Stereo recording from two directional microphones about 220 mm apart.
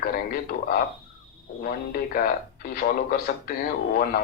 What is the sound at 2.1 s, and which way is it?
Speech, 45° left (ahead or behind).